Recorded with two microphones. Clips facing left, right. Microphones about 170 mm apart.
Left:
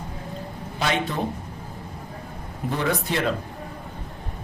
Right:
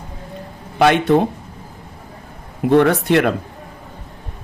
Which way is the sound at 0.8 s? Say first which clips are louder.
Right 12 dB; 70° right (ahead or behind).